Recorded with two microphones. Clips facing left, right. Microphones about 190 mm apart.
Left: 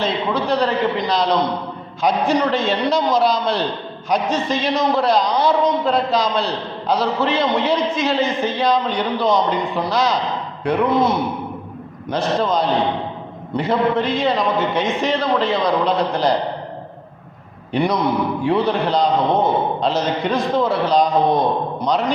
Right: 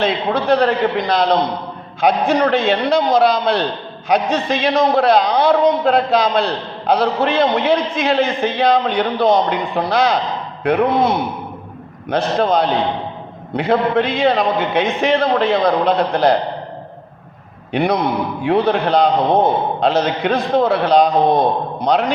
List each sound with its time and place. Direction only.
0.0 s a man's voice: 55° right (ahead or behind)
12.0 s a man's voice: 60° right (ahead or behind)
17.7 s a man's voice: 60° right (ahead or behind)